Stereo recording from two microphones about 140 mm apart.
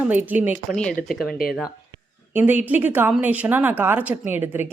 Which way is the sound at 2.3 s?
10° right (ahead or behind).